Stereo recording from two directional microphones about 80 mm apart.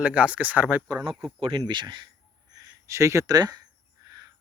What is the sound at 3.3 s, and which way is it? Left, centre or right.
Speech, right.